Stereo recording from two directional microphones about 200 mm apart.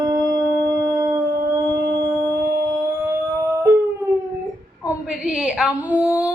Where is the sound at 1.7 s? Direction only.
60° right (ahead or behind).